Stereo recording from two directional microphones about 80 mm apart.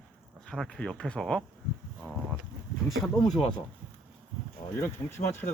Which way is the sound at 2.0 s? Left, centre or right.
Left.